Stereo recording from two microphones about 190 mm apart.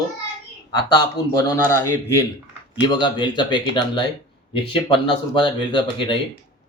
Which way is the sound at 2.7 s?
25° left (ahead or behind).